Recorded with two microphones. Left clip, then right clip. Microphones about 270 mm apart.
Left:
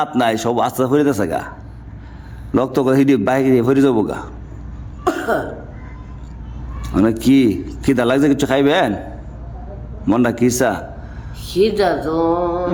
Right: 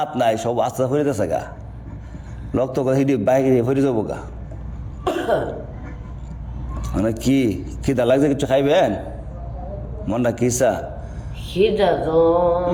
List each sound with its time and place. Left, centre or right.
0.0 s a man's voice: left
2.5 s a man's voice: left
3.8 s a man's voice: left
5.0 s throat clearing: centre
6.8 s a man's voice: left
10.1 s a man's voice: left